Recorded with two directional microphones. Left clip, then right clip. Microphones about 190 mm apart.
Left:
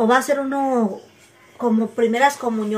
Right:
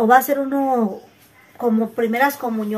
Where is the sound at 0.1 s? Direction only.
5° right (ahead or behind).